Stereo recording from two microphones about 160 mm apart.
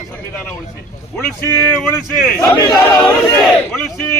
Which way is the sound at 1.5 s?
15° left (ahead or behind).